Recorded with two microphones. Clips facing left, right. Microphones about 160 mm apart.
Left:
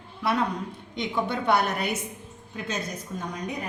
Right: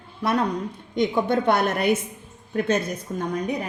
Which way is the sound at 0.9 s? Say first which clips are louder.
Right 7 dB; 45° right (ahead or behind).